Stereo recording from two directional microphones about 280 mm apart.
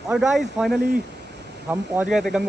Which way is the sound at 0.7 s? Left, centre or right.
Right.